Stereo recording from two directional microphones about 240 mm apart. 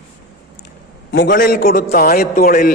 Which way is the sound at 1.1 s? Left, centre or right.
Left.